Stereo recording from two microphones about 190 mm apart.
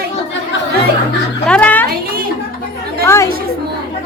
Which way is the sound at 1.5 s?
5° left (ahead or behind).